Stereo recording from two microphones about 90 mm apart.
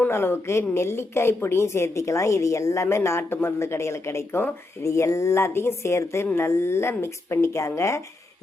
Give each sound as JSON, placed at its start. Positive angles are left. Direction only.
{"t": 0.1, "sound": "a woman's voice", "side_deg": 25}